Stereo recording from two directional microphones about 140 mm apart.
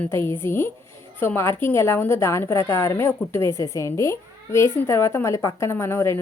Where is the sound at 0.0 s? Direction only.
15° left (ahead or behind).